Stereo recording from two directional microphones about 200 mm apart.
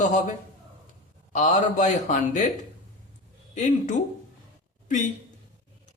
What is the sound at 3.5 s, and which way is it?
Speech, 35° left (ahead or behind).